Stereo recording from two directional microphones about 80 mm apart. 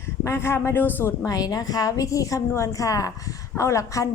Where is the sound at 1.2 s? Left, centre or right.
Left.